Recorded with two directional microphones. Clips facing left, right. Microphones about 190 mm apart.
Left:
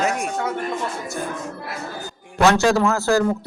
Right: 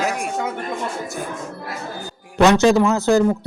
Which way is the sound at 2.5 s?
20° right (ahead or behind).